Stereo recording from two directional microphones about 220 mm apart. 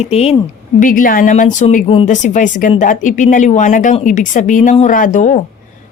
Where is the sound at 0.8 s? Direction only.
40° left (ahead or behind).